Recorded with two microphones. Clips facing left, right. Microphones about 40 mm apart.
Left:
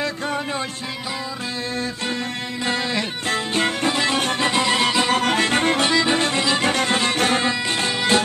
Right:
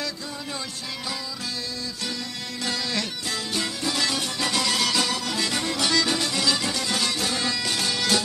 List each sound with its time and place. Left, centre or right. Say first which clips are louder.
2.6 s music: left 5 dB; left
3.3 s music: left 7 dB; left
4.2 s music: left 7 dB; left
4.5 s music: left 4 dB; left
5.1 s music: left 8 dB; left
5.9 s music: left 5 dB; left